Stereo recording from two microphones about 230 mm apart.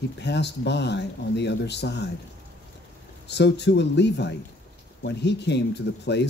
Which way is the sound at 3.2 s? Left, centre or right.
Left.